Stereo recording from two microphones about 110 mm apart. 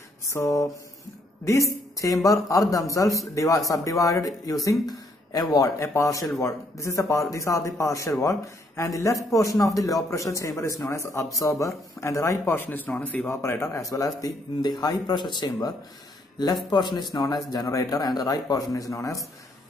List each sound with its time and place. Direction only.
0.2 s a man's voice: 30° left (ahead or behind)
13.4 s a man's voice: 25° left (ahead or behind)